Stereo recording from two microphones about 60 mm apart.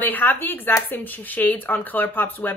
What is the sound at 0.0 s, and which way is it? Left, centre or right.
A woman's voice, left.